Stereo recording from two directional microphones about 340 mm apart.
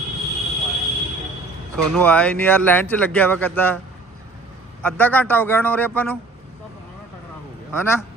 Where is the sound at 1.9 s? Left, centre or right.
Centre.